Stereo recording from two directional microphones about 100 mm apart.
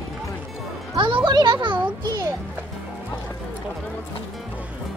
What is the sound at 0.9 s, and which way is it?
Music, 55° right (ahead or behind).